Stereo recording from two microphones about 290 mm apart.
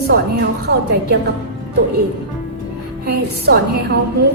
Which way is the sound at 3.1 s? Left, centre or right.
Right.